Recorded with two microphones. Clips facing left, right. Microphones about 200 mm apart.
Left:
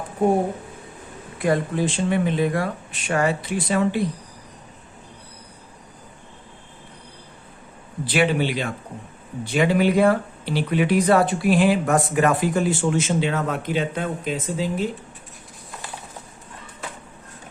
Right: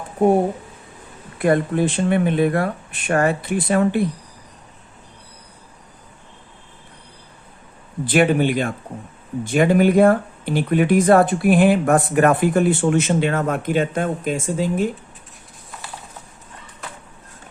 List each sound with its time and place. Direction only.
1.4 s speech: 55° right (ahead or behind)
8.0 s speech: 50° right (ahead or behind)